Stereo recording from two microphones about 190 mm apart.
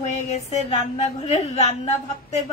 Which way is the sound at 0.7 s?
35° left (ahead or behind).